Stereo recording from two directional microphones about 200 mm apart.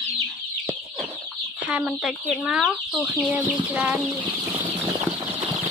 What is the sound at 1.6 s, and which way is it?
Speech, 5° right (ahead or behind).